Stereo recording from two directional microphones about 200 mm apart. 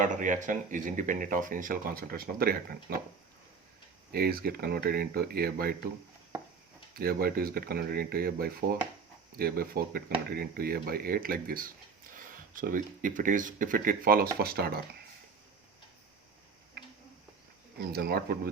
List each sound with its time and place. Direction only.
0.0 s speech: 40° right (ahead or behind)
4.1 s speech: 50° right (ahead or behind)
6.9 s speech: 50° right (ahead or behind)
17.7 s speech: 50° right (ahead or behind)